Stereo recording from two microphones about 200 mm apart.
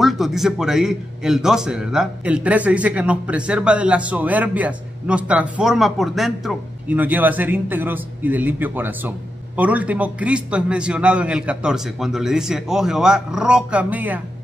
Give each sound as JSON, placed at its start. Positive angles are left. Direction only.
{"t": 0.0, "sound": "a man's voice", "side_deg": 0}